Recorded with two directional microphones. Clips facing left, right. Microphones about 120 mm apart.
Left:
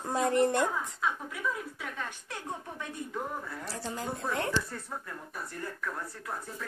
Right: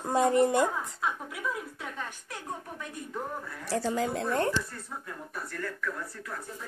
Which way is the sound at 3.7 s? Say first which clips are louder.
Right 14 dB; 90° right.